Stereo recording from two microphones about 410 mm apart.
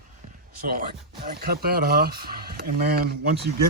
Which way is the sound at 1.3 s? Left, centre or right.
Right.